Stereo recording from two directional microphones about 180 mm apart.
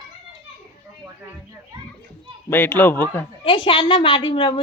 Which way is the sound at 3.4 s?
30° left (ahead or behind).